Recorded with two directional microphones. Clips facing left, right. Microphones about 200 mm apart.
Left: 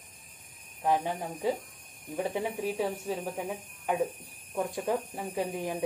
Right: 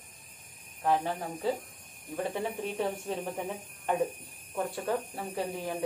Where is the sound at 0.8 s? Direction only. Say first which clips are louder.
Even; 15° left (ahead or behind).